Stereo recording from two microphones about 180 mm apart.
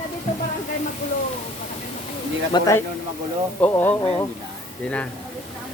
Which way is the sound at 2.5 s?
20° left (ahead or behind).